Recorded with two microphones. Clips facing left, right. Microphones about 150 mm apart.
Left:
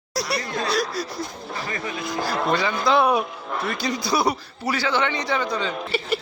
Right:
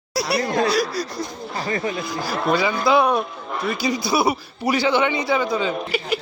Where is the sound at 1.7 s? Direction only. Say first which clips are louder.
Right 8 dB; 35° right (ahead or behind).